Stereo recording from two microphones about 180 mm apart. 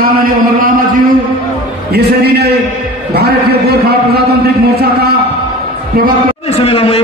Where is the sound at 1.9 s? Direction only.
65° right (ahead or behind).